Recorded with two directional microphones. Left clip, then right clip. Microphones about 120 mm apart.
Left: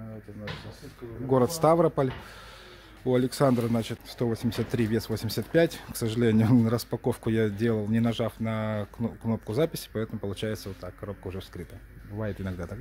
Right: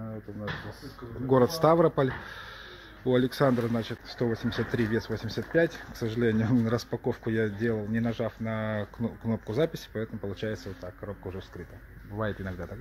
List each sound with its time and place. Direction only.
1.6 s speech: 20° left (ahead or behind)
3.1 s speech: 30° left (ahead or behind); by 6.7 s 60° left (ahead or behind)
6.7 s speech: 35° left (ahead or behind)
7.0 s speech: 55° left (ahead or behind)
8.5 s speech: 35° left (ahead or behind); by 11.4 s 60° left (ahead or behind)
12.2 s speech: 40° left (ahead or behind)